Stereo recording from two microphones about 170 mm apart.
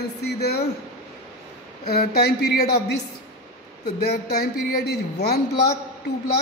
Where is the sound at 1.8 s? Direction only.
65° left (ahead or behind).